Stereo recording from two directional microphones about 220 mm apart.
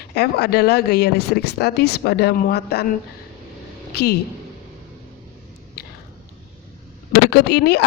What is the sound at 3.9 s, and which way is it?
Speech, 45° left (ahead or behind).